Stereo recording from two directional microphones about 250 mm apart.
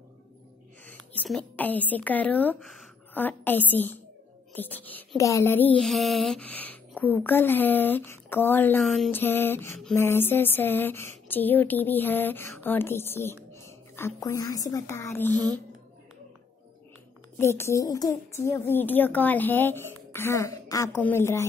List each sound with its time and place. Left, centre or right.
0.8 s a woman's voice: centre
17.4 s speech: centre